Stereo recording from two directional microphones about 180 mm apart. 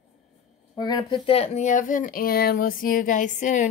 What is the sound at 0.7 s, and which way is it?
Speech, 25° left (ahead or behind).